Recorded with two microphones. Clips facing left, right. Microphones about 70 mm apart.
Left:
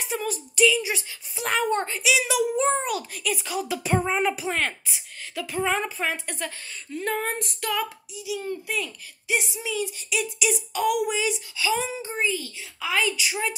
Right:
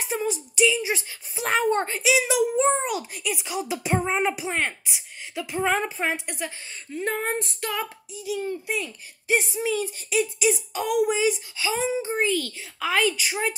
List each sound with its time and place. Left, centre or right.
0.0 s speech: right
6.2 s a woman's voice: centre
6.9 s speech: right
8.2 s a woman's voice: right
8.5 s speech: right
12.2 s a child's voice: right
12.8 s a woman's voice: right